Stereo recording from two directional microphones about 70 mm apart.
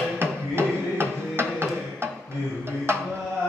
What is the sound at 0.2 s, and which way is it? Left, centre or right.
Music, right.